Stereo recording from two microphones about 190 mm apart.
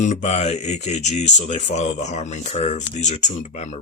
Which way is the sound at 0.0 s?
40° left (ahead or behind).